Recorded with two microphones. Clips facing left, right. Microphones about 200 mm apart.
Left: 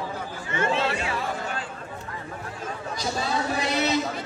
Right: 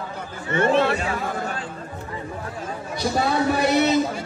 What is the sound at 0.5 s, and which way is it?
Chatter, 60° right (ahead or behind).